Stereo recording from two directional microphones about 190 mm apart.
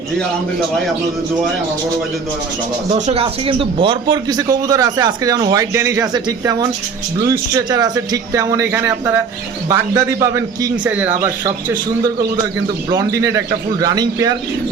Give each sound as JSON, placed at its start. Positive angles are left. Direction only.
{"t": 2.9, "sound": "speech", "side_deg": -30}
{"t": 11.4, "sound": "speech", "side_deg": -20}